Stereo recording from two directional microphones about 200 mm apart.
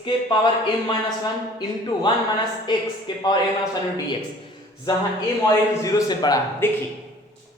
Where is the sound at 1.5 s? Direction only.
20° left (ahead or behind).